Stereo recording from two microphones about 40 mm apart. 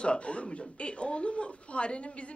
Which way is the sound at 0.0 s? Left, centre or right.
Left.